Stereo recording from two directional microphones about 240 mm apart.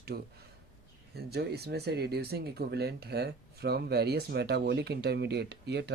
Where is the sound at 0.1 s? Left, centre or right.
Right.